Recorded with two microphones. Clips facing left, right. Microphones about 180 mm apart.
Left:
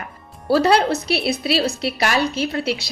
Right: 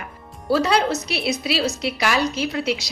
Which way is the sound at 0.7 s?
60° left (ahead or behind).